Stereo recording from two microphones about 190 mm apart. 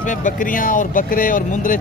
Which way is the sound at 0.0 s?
40° left (ahead or behind).